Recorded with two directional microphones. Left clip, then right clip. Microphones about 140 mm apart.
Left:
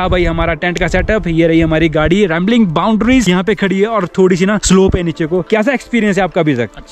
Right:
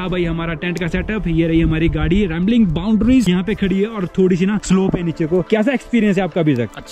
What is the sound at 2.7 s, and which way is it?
Speech, 15° right (ahead or behind).